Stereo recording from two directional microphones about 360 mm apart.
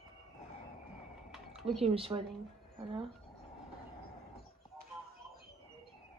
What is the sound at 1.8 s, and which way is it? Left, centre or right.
Speech, centre.